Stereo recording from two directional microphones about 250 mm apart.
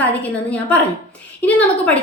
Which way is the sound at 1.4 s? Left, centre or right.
Centre.